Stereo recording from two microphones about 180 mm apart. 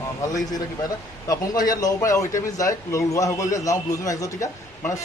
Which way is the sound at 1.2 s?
20° left (ahead or behind).